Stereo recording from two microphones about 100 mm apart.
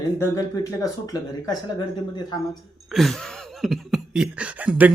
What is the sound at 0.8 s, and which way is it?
Speech, 40° left (ahead or behind).